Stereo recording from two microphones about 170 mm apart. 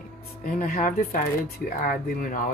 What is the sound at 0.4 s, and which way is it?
Speech, 60° left (ahead or behind).